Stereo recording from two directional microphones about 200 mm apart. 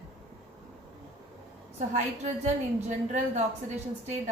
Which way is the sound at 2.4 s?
35° right (ahead or behind).